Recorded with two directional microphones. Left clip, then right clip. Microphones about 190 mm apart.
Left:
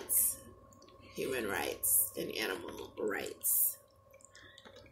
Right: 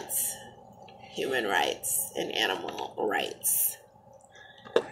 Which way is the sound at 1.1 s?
25° left (ahead or behind).